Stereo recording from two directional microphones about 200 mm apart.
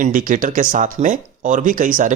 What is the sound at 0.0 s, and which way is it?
Speech, 40° right (ahead or behind).